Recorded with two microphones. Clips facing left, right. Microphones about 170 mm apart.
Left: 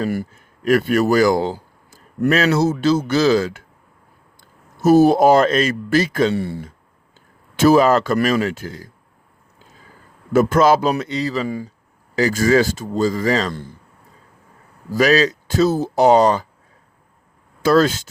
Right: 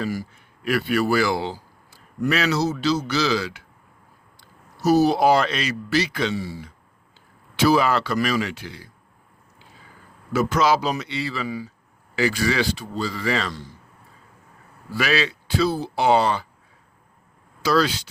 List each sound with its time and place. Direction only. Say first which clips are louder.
0.1 s speech: left 5 dB; 50° left (ahead or behind)
7.6 s speech: left 6 dB; 45° left (ahead or behind)
10.3 s speech: left 6 dB; 50° left (ahead or behind)
14.8 s speech: left 8 dB; 40° left (ahead or behind)
17.6 s speech: left 6 dB; 50° left (ahead or behind)